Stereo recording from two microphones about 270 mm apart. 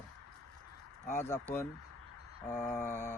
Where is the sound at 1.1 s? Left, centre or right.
Centre.